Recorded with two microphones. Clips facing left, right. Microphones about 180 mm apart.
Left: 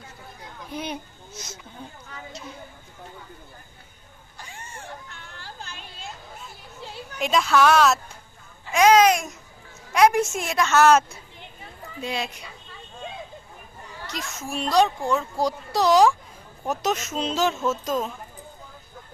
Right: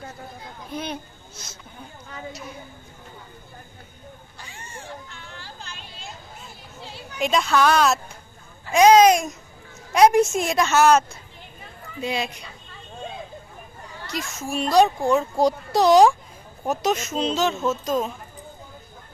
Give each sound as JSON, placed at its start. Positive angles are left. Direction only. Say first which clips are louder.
{"t": 5.4, "sound": "a sound", "louder": "left 3 dB", "side_deg": 50}
{"t": 7.2, "sound": "speech", "louder": "even", "side_deg": 0}
{"t": 8.7, "sound": "a child's voice", "louder": "right 3 dB", "side_deg": -20}
{"t": 10.8, "sound": "speech", "louder": "even", "side_deg": 0}
{"t": 12.0, "sound": "speech", "louder": "right 3 dB", "side_deg": 0}
{"t": 14.1, "sound": "a child's voice", "louder": "right 4 dB", "side_deg": 0}
{"t": 16.6, "sound": "speech", "louder": "right 2 dB", "side_deg": 0}